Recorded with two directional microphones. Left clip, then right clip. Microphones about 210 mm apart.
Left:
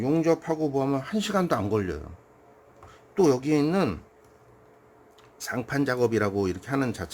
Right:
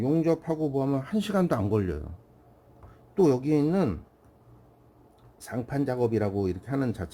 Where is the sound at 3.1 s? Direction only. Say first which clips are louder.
Left 1 dB; 5° right (ahead or behind).